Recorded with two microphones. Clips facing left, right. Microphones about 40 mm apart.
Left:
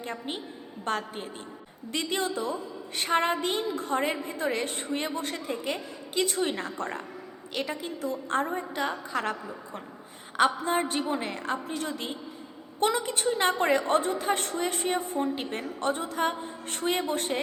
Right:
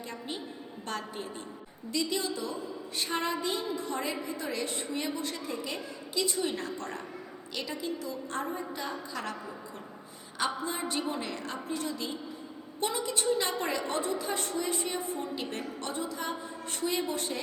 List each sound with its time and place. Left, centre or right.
0.0 s a woman's voice: left
6.6 s a woman's voice: left
10.3 s a woman's voice: left
11.7 s a woman's voice: left
15.4 s a woman's voice: left
15.9 s a woman's voice: left